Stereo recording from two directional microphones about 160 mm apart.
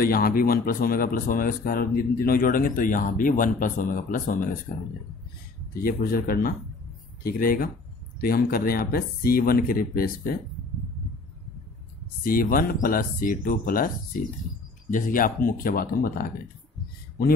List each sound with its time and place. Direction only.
0.0 s speech: 65° left (ahead or behind)
5.8 s speech: 65° left (ahead or behind)
12.2 s speech: 65° left (ahead or behind)